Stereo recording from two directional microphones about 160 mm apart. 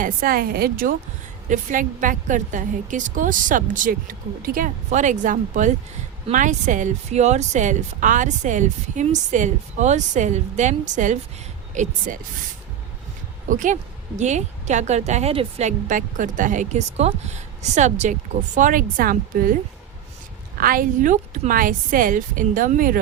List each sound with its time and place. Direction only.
0.0 s a woman's voice: 60° right (ahead or behind)
1.5 s a woman's voice: 55° right (ahead or behind)
13.5 s a woman's voice: 55° right (ahead or behind)
20.6 s a woman's voice: 60° right (ahead or behind)